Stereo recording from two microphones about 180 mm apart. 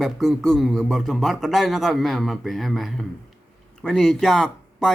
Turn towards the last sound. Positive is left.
turn(degrees=5)  # may be behind; listen again after turning